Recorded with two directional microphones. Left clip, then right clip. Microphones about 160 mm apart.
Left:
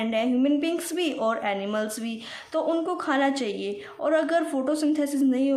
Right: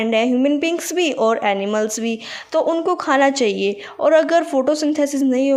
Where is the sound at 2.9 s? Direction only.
40° right (ahead or behind).